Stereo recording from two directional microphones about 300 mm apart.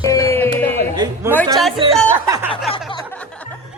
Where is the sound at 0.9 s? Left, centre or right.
Centre.